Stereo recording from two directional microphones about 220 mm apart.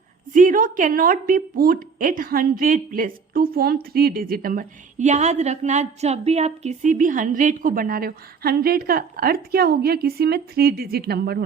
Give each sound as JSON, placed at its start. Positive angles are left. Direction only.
{"t": 0.3, "sound": "a woman's voice", "side_deg": -35}